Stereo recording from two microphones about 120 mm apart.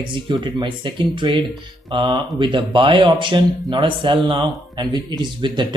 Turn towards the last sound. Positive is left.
turn(degrees=-40)  # may be behind; listen again after turning